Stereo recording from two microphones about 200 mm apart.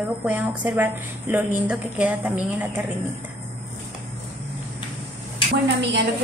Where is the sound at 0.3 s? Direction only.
10° right (ahead or behind).